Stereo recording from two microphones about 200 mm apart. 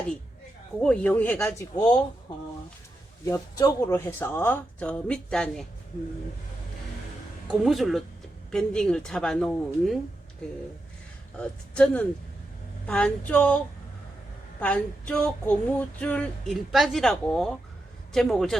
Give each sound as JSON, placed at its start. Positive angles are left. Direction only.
{"t": 0.8, "sound": "speech", "side_deg": 5}
{"t": 3.2, "sound": "speech", "side_deg": 15}
{"t": 7.6, "sound": "female singing", "side_deg": 0}
{"t": 12.8, "sound": "speech", "side_deg": 5}
{"t": 14.6, "sound": "female singing", "side_deg": 5}